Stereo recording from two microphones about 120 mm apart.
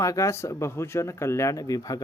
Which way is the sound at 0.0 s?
25° left (ahead or behind).